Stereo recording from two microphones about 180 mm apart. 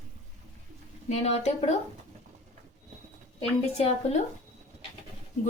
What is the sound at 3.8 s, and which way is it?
Speech, 35° left (ahead or behind).